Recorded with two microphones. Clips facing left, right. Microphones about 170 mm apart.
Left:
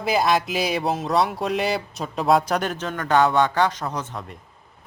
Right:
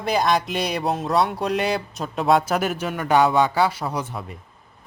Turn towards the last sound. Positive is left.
turn(degrees=-5)  # may be behind; listen again after turning